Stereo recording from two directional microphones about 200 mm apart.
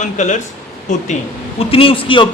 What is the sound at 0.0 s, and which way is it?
Speech, 35° left (ahead or behind).